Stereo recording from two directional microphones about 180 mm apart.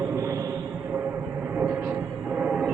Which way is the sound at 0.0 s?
15° right (ahead or behind).